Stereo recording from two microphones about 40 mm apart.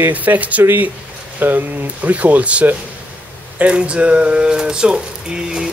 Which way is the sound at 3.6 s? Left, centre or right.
Right.